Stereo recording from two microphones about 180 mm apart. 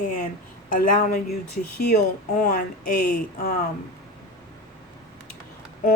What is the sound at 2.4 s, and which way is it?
Speech, 55° left (ahead or behind).